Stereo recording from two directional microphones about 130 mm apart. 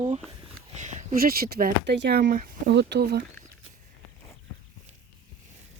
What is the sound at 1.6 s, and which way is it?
Speech, 85° right.